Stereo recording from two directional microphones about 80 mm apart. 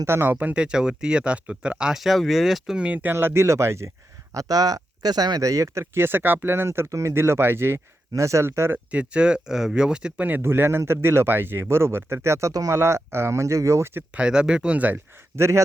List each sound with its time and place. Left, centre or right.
0.0 s speech: right; by 2.7 s centre
2.7 s speech: centre; by 3.8 s right
4.4 s speech: right
8.9 s speech: centre
10.2 s speech: right
14.1 s speech: centre
15.4 s speech: right